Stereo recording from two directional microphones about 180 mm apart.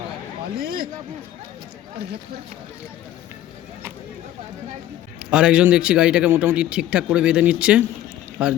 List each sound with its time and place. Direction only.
0.6 s speech: 60° right (ahead or behind)
5.2 s a man's voice: 5° right (ahead or behind)